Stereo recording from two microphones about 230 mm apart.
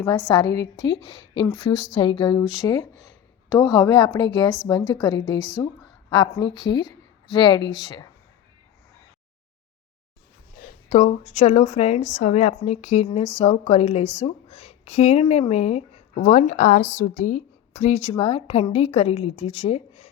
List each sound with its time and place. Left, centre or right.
0.3 s a woman's voice: centre
1.7 s speech: centre
2.0 s a woman's voice: centre
10.6 s speech: left